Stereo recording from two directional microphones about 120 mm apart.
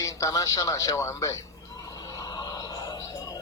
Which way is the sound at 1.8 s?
30° left (ahead or behind).